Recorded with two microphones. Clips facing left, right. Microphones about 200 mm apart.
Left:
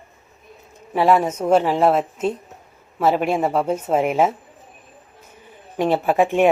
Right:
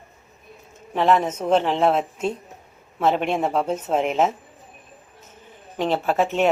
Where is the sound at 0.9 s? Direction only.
10° left (ahead or behind).